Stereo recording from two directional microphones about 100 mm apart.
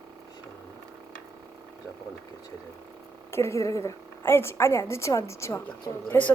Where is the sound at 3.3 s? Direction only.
30° left (ahead or behind).